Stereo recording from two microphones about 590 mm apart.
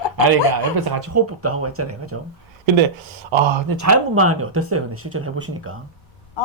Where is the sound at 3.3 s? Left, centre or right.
Right.